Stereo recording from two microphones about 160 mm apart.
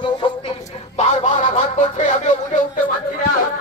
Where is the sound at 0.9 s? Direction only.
45° left (ahead or behind).